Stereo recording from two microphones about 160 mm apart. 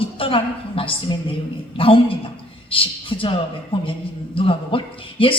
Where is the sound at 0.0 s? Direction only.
35° left (ahead or behind).